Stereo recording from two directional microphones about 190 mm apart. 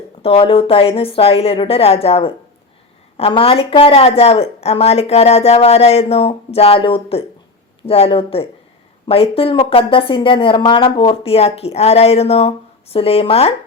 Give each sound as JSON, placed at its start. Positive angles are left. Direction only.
{"t": 0.2, "sound": "a woman's voice", "side_deg": 30}